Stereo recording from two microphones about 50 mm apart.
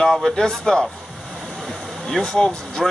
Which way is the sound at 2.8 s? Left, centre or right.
Centre.